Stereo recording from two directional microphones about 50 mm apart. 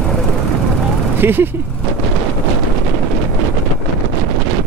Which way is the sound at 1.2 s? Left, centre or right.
Right.